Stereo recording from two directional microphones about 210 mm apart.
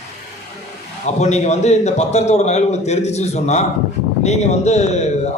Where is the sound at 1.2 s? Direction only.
30° left (ahead or behind).